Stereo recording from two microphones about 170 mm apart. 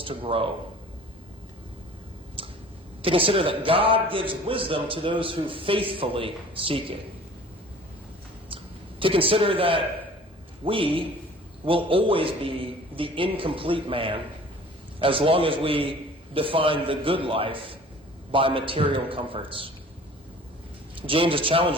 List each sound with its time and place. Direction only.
0.0 s a man's voice: 30° right (ahead or behind)
3.0 s a man's voice: 30° right (ahead or behind)
8.4 s a sound: 30° right (ahead or behind)
10.7 s a man's voice: 30° right (ahead or behind)
21.1 s a man's voice: 30° right (ahead or behind)